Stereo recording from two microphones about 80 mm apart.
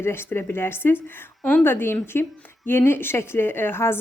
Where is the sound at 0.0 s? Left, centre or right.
Left.